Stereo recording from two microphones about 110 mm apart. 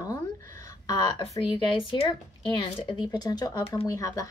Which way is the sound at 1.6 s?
50° left (ahead or behind).